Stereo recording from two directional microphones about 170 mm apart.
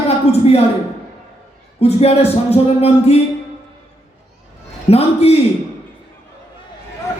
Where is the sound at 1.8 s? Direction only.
35° left (ahead or behind).